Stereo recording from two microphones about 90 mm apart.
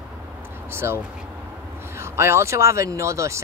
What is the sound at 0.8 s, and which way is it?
Speech, 30° right (ahead or behind).